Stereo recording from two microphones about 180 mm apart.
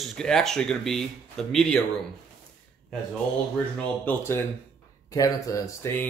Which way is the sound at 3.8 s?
10° left (ahead or behind).